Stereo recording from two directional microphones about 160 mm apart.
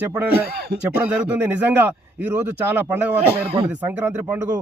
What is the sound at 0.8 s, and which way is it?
A man's voice, 10° right (ahead or behind).